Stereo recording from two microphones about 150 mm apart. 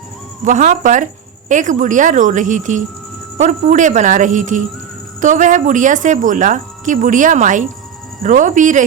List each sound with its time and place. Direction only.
0.4 s speech: 55° right (ahead or behind)